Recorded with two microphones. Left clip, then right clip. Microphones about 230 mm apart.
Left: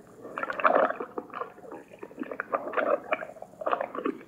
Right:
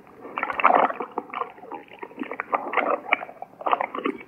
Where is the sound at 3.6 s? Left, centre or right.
Right.